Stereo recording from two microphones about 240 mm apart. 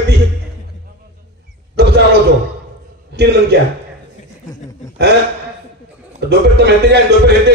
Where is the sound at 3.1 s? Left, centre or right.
Right.